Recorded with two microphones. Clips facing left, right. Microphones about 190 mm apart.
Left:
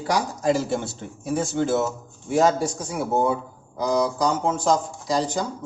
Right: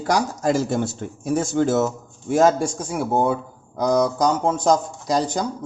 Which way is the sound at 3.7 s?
45° right (ahead or behind).